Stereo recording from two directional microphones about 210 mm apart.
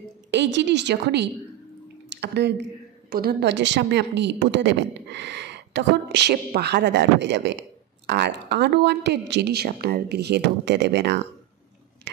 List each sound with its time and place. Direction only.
0.3 s a woman's voice: 55° right (ahead or behind)